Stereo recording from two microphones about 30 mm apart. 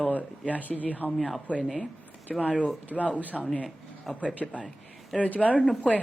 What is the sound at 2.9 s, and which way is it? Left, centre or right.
Speech, left.